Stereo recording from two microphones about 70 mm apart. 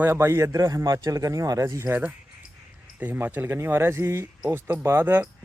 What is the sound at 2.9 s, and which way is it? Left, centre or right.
A man's voice, right.